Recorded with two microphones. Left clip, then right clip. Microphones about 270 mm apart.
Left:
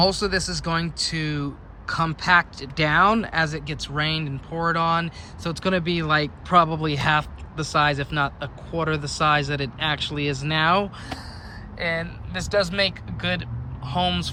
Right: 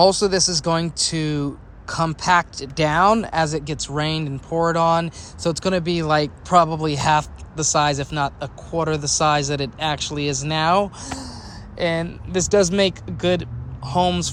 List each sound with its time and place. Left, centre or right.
0.0 s speech: centre
11.8 s speech: right